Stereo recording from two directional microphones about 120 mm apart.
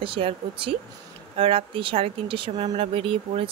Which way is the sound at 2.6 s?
60° right (ahead or behind).